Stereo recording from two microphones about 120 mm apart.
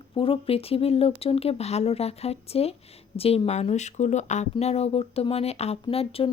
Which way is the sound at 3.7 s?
75° left (ahead or behind).